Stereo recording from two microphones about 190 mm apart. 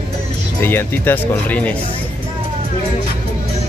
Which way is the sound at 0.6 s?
10° left (ahead or behind).